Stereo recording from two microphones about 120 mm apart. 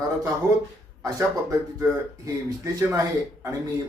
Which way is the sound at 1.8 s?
25° right (ahead or behind).